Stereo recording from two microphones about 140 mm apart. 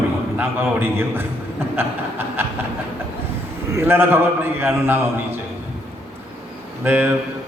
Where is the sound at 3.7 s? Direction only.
15° right (ahead or behind).